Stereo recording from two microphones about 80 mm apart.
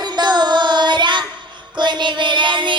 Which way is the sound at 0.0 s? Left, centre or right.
Right.